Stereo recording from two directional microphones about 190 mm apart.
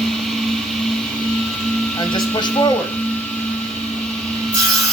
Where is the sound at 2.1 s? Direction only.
20° left (ahead or behind).